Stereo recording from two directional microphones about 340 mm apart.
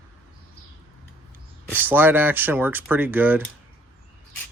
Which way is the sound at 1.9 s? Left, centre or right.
Centre.